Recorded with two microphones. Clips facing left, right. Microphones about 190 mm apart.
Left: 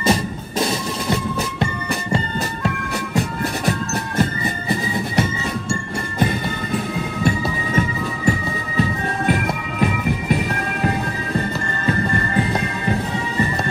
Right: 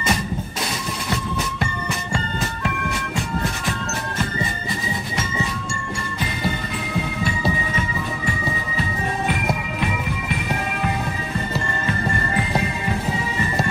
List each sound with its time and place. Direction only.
0.0 s music: 30° left (ahead or behind)